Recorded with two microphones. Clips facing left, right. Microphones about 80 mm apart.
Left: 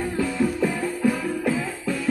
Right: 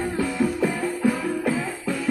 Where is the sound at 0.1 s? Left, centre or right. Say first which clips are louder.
Even; centre.